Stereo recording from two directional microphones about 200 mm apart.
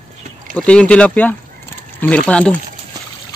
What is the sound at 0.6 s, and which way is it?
Speech, 5° left (ahead or behind).